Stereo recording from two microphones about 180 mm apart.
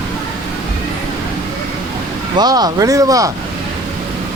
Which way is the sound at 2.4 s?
20° right (ahead or behind).